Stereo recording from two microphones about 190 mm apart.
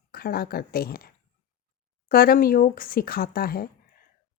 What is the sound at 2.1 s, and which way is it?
Speech, 50° left (ahead or behind).